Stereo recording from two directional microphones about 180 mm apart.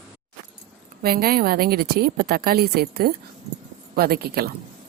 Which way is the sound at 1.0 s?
55° right (ahead or behind).